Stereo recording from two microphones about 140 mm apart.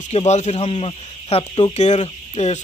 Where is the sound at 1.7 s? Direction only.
55° left (ahead or behind).